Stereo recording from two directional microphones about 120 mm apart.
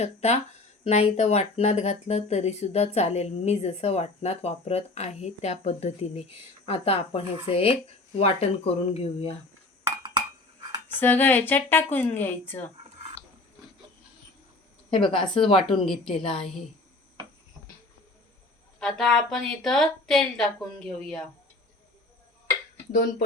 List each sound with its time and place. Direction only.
0.0 s speech: 65° left (ahead or behind)
10.8 s speech: 15° left (ahead or behind)
14.8 s a woman's voice: 45° left (ahead or behind)
15.6 s a woman's voice: 5° left (ahead or behind)
18.8 s a woman's voice: 5° left (ahead or behind)